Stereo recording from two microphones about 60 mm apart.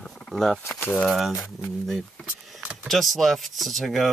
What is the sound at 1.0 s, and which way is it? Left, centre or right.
Speech, centre.